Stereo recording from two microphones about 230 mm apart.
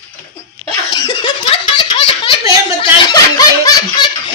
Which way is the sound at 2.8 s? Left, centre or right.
Centre.